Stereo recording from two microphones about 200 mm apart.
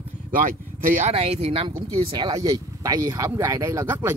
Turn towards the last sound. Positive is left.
turn(degrees=-10)  # may be behind; listen again after turning